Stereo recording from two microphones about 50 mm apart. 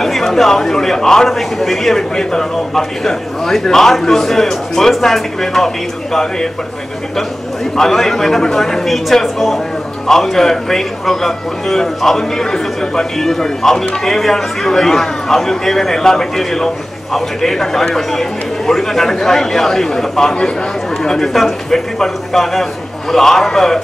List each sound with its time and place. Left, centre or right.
0.0 s a man's voice: centre
7.7 s a man's voice: centre